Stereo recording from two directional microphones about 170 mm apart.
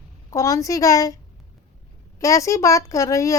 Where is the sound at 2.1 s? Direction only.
20° left (ahead or behind).